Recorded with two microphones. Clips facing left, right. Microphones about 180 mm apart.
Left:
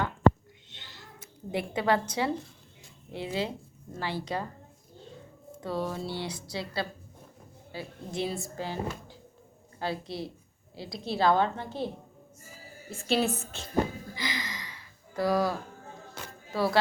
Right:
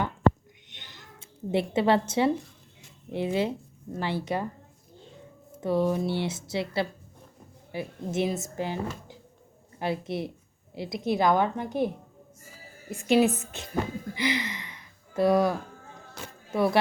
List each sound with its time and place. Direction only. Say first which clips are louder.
0.7 s a sound: even; 20° right (ahead or behind)
3.1 s a woman's voice: right 5 dB; 20° right (ahead or behind)
5.5 s a woman's voice: right 7 dB; 25° right (ahead or behind)
12.9 s a woman's voice: right 6 dB; 15° right (ahead or behind)
14.2 s a sound: right 8 dB; 20° right (ahead or behind)
15.1 s music: right 4 dB; 25° right (ahead or behind)